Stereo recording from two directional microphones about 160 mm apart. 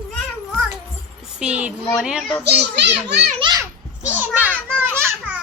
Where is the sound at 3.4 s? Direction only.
25° right (ahead or behind).